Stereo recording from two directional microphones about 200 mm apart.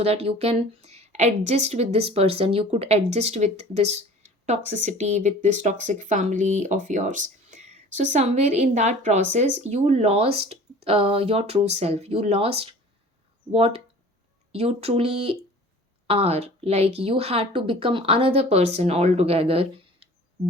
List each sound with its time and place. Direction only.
0.0 s speech: 30° right (ahead or behind)